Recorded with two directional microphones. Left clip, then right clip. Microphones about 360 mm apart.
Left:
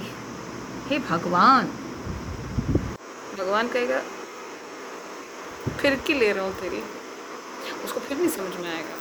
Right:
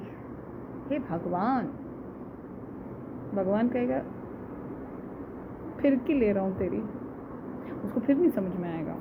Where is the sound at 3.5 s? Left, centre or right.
Centre.